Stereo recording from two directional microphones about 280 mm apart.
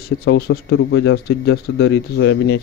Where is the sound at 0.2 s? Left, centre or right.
Left.